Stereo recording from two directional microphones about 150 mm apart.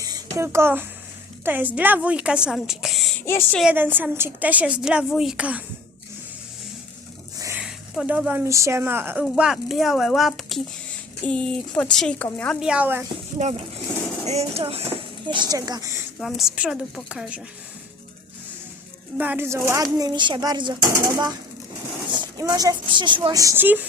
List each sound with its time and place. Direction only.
0.0 s a sound: 20° right (ahead or behind)
1.5 s a woman's voice: 10° right (ahead or behind)
3.2 s speech: 15° left (ahead or behind)
3.6 s a woman's voice: 10° right (ahead or behind)
7.3 s a sound: 20° right (ahead or behind)
7.6 s speech: 5° right (ahead or behind)
9.2 s a woman's voice: centre (ahead or behind)
12.5 s a woman's voice: 5° right (ahead or behind)
13.4 s speech: 55° right (ahead or behind)
14.3 s speech: 45° right (ahead or behind)
15.4 s speech: 25° right (ahead or behind)
16.1 s a woman's voice: centre (ahead or behind)
19.1 s speech: 10° right (ahead or behind)